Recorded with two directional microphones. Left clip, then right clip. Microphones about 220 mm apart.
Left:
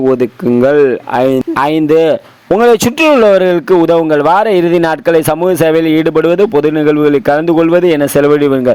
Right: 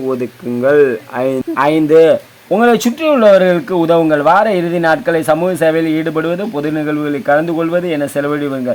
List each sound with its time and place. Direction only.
0.1 s speech: 30° left (ahead or behind)